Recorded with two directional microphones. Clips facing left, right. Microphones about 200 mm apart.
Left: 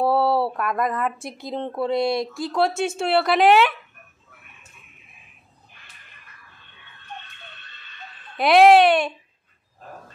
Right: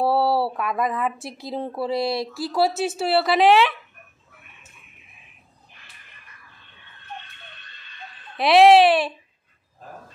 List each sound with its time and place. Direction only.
0.0 s speech: centre (ahead or behind)
8.4 s speech: centre (ahead or behind)